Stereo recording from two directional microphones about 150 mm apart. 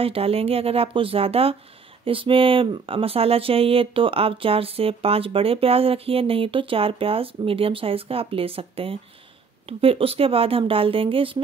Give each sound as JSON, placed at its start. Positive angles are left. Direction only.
{"t": 0.0, "sound": "speech", "side_deg": -40}